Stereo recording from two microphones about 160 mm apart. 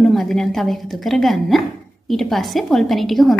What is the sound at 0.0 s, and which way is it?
A woman's voice, centre (ahead or behind).